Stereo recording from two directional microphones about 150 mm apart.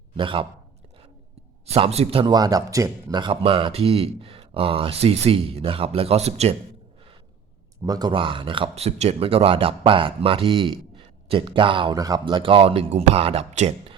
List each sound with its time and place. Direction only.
0.2 s speech: 35° right (ahead or behind)
1.6 s speech: 45° right (ahead or behind)
7.9 s speech: 30° right (ahead or behind); by 13.9 s 45° right (ahead or behind)